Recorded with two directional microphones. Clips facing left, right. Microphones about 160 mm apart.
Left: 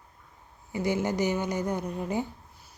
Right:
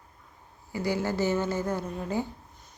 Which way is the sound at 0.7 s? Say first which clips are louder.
Left 1 dB; 20° left (ahead or behind).